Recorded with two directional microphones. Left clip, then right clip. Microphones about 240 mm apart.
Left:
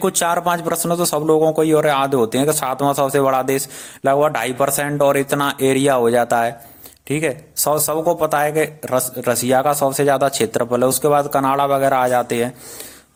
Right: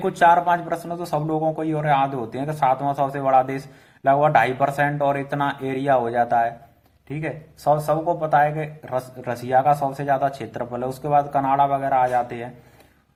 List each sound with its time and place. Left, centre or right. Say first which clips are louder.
0.0 s speech: right 2 dB; left